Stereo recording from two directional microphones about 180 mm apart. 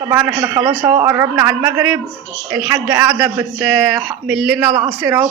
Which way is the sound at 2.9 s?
15° right (ahead or behind).